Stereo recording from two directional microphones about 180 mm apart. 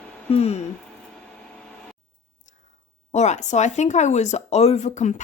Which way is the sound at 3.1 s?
40° left (ahead or behind).